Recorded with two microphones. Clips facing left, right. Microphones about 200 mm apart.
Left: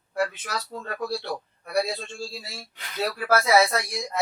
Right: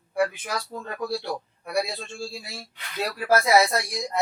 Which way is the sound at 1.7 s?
10° right (ahead or behind).